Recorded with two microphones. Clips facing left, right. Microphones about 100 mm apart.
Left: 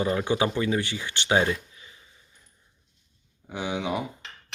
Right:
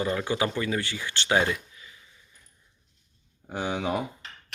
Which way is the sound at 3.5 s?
45° right (ahead or behind).